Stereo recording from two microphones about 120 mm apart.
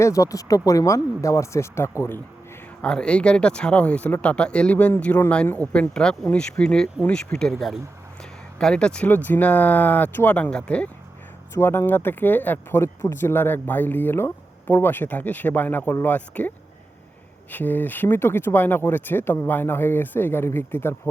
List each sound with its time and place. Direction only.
0.0 s speech: 25° left (ahead or behind)
2.8 s speech: 10° left (ahead or behind)
11.5 s speech: 20° left (ahead or behind)
17.5 s speech: 15° left (ahead or behind)